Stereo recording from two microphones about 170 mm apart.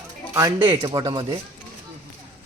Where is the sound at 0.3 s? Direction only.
25° right (ahead or behind).